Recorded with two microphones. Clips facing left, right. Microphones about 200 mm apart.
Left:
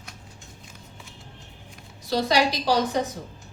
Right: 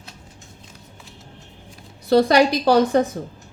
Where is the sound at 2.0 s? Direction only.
55° right (ahead or behind).